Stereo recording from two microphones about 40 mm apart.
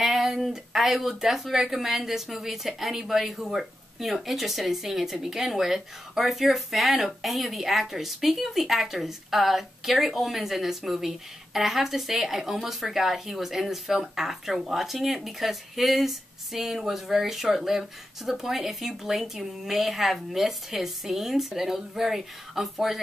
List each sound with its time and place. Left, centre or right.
0.0 s speech: centre